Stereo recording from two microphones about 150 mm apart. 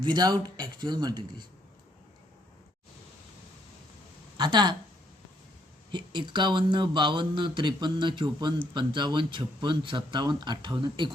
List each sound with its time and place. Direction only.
0.0 s speech: 30° right (ahead or behind)
4.4 s speech: 30° right (ahead or behind)
5.9 s speech: 30° right (ahead or behind)